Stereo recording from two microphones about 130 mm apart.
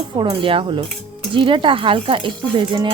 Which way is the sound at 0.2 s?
40° right (ahead or behind).